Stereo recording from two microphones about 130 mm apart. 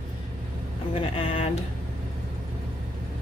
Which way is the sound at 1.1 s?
50° left (ahead or behind).